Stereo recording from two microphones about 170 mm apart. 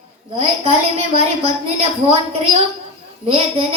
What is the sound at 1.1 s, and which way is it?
Speech, 35° right (ahead or behind).